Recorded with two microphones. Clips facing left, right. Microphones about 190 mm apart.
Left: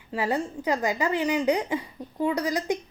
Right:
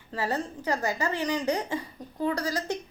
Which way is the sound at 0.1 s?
15° left (ahead or behind).